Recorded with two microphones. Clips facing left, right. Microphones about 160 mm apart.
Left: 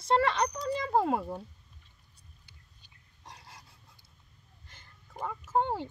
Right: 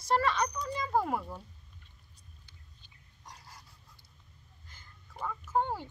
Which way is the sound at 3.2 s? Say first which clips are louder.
Left 1 dB; 25° left (ahead or behind).